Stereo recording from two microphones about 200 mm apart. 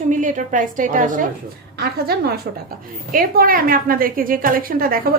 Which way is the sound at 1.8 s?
50° right (ahead or behind).